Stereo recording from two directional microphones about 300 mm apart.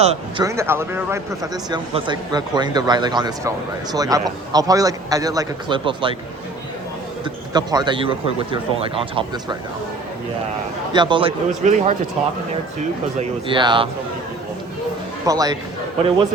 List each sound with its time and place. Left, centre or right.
0.0 s a man's voice: right
0.4 s a man's voice: centre
7.5 s a man's voice: centre
10.9 s a man's voice: centre
13.1 s a man's voice: centre
15.2 s speech: centre